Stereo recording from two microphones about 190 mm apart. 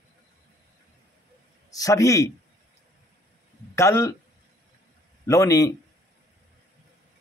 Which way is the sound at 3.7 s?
15° left (ahead or behind).